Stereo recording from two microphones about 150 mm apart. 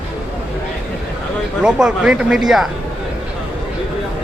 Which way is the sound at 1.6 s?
5° right (ahead or behind).